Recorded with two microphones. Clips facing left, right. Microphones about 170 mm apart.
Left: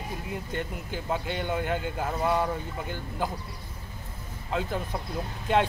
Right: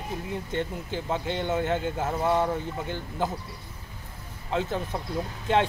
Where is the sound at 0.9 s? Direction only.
10° left (ahead or behind).